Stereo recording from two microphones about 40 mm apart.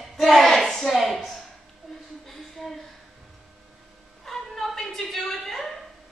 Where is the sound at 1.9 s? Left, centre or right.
Centre.